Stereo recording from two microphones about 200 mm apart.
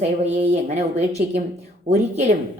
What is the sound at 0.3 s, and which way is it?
Speech, 35° right (ahead or behind).